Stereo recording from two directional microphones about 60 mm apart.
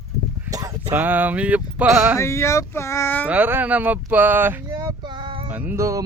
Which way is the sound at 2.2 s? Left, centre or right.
Left.